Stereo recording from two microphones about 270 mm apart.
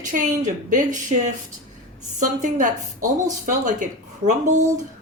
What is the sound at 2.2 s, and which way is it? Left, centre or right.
Speech, right.